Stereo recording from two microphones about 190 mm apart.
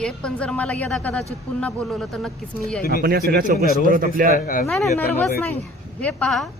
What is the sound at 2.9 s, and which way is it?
A man's voice, 50° right (ahead or behind).